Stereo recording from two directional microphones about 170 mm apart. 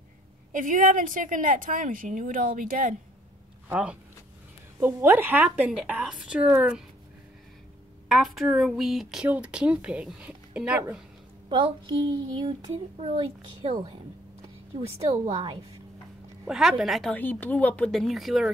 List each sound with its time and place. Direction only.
0.5 s a woman's voice: 50° right (ahead or behind)
3.6 s a woman's voice: 10° right (ahead or behind)
8.1 s speech: centre (ahead or behind)
11.4 s child singing: 25° right (ahead or behind)
14.9 s a woman's voice: 35° right (ahead or behind)
16.4 s speech: centre (ahead or behind)